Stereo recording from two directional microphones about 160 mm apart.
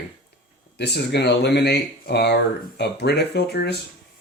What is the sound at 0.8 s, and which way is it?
Speech, 90° left.